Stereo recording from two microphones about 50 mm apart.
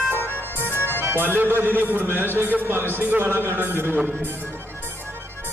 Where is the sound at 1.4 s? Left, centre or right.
Right.